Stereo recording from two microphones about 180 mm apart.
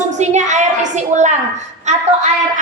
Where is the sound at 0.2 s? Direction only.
40° right (ahead or behind).